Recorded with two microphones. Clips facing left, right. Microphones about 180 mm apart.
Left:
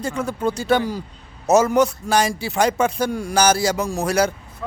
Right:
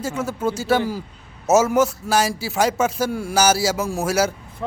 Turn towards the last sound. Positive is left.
turn(degrees=-20)  # may be behind; listen again after turning